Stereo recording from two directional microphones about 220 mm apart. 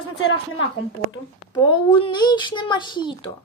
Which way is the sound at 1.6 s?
20° left (ahead or behind).